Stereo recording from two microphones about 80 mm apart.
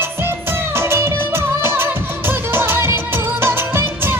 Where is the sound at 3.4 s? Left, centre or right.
Right.